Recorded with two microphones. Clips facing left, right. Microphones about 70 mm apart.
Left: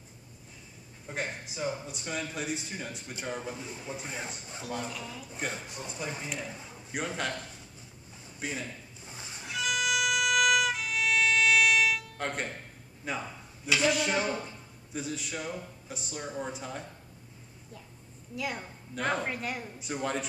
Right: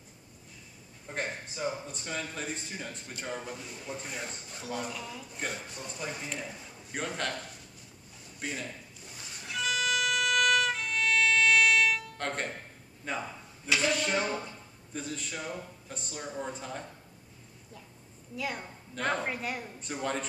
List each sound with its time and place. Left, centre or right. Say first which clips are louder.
1.0 s a man's voice: even; centre
4.6 s speech: even; centre
5.9 s a man's voice: left 1 dB; centre
9.0 s music: left 3 dB; left
9.5 s violin: even; centre
13.2 s a sound: even; centre
13.8 s speech: left 3 dB; centre
18.3 s speech: even; centre